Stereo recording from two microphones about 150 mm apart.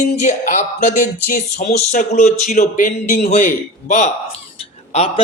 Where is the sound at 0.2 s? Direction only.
55° left (ahead or behind).